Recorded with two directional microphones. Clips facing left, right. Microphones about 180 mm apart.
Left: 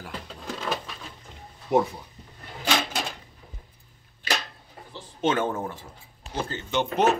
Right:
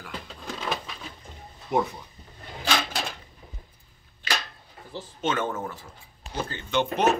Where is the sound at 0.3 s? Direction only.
Centre (ahead or behind).